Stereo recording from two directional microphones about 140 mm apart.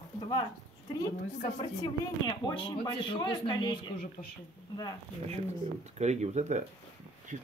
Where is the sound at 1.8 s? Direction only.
30° left (ahead or behind).